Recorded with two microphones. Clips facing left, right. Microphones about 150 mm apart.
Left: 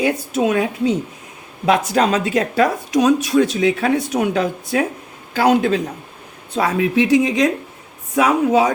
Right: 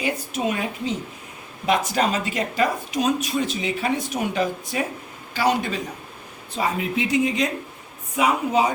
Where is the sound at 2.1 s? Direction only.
90° left.